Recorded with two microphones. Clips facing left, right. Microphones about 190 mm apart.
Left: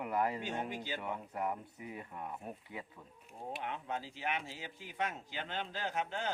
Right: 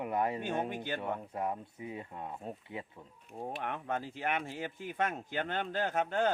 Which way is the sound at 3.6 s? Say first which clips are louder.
Right 4 dB; 55° right (ahead or behind).